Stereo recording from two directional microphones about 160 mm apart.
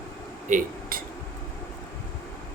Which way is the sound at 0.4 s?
60° right (ahead or behind).